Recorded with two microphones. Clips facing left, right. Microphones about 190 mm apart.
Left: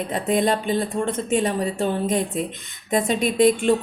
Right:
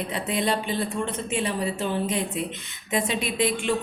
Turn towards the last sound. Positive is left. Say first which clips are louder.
# left 8 dB
turn(degrees=45)  # may be behind; listen again after turning